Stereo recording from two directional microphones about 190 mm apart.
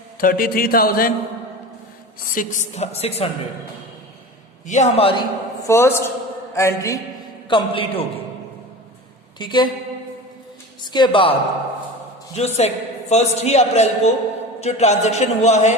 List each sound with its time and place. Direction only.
0.2 s a sound: 50° left (ahead or behind)
2.3 s a man's voice: 45° left (ahead or behind)
4.6 s a man's voice: 40° left (ahead or behind)
5.6 s a man's voice: 15° left (ahead or behind)
7.5 s a man's voice: 25° left (ahead or behind)
9.4 s a man's voice: 25° left (ahead or behind)
10.9 s a man's voice: 25° left (ahead or behind)
12.4 s a man's voice: 35° left (ahead or behind)